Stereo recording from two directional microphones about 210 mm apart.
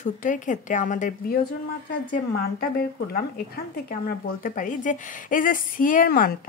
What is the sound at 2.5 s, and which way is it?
A woman's voice, 45° left (ahead or behind).